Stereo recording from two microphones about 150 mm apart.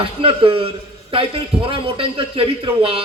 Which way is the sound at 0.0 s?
40° right (ahead or behind).